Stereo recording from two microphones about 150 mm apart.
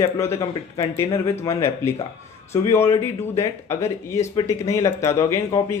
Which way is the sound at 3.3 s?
20° left (ahead or behind).